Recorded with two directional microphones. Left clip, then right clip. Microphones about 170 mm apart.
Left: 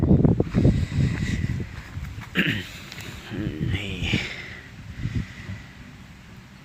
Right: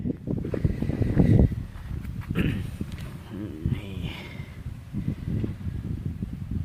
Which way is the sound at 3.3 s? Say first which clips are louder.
Left 5 dB; 5° left (ahead or behind).